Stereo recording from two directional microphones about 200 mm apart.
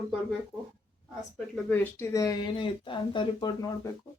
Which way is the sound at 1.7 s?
10° left (ahead or behind).